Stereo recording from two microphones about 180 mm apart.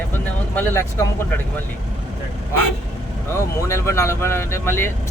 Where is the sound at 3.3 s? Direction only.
15° left (ahead or behind).